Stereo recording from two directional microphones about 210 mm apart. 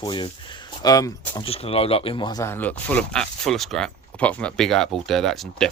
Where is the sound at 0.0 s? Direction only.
20° left (ahead or behind).